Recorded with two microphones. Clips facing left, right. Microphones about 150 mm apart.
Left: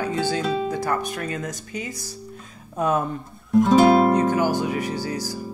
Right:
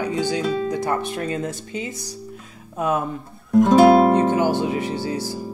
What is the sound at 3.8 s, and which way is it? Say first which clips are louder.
Speech: right 5 dB; 25° right (ahead or behind).